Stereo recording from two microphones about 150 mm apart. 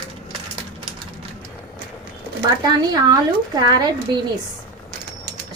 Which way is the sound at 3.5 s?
25° right (ahead or behind).